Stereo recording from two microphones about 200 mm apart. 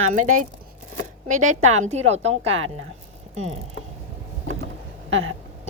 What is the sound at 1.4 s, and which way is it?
A woman's voice, 35° right (ahead or behind).